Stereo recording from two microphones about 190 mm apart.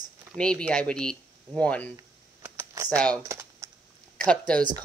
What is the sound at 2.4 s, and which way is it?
Computer keyboard, 15° right (ahead or behind).